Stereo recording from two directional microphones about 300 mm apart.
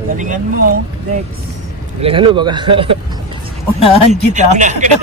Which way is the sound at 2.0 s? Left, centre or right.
Centre.